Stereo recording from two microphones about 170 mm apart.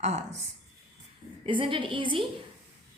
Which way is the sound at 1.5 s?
30° right (ahead or behind).